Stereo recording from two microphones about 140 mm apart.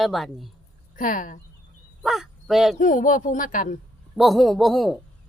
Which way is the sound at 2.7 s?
70° left (ahead or behind).